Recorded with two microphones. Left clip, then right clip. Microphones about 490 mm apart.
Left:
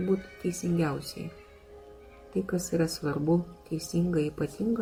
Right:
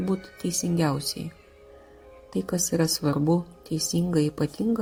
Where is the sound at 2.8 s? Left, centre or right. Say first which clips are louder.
Right 5 dB; centre.